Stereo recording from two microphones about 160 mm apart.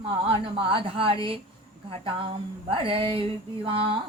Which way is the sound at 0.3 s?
35° right (ahead or behind).